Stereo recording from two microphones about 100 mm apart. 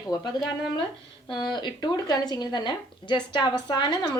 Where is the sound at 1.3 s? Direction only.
50° left (ahead or behind).